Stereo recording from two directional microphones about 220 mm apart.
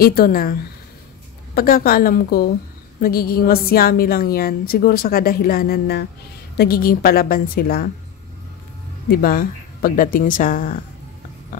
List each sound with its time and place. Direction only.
0.0 s a woman's voice: 45° left (ahead or behind)
9.1 s speech: 40° left (ahead or behind)